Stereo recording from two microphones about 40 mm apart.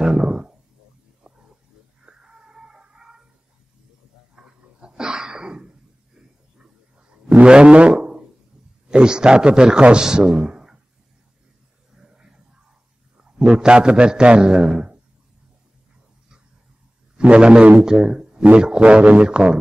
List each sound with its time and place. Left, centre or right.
0.0 s a sound: centre
1.3 s wild animals: right
2.0 s music: centre
4.4 s sneeze: centre
7.4 s a man's voice: right
7.9 s music: right
8.8 s a man's voice: right
11.9 s a sound: centre
13.2 s a man's voice: right
17.2 s a man's voice: right
17.7 s speech: centre
18.8 s speech: right
19.2 s a man's voice: right